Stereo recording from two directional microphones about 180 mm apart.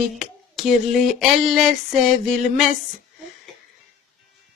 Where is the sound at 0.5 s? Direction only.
Centre (ahead or behind).